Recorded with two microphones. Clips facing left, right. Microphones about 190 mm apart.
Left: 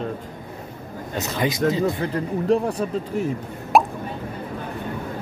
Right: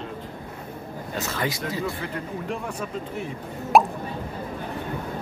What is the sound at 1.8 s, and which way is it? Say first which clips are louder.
Speech: left 7 dB; 35° left (ahead or behind).